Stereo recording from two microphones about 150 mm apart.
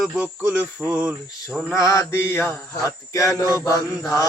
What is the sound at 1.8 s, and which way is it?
Mantra, 20° left (ahead or behind).